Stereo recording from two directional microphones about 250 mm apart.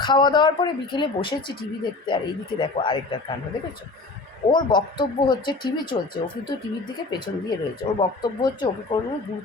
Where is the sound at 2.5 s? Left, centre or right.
Centre.